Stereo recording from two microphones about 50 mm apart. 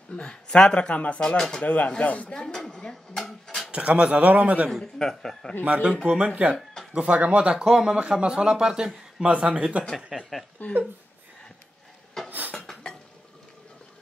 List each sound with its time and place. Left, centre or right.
0.1 s speech: centre
1.2 s speech: centre
1.6 s speech: left
2.3 s dishes: centre
3.7 s a man's voice: right
4.9 s speech: centre
6.0 s a man's voice: right
10.1 s speech: centre
10.6 s speech: left
12.3 s a sound: right